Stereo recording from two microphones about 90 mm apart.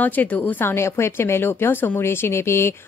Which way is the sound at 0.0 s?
20° left (ahead or behind).